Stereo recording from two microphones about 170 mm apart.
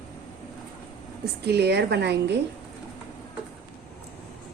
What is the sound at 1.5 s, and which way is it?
Speech, 75° right (ahead or behind).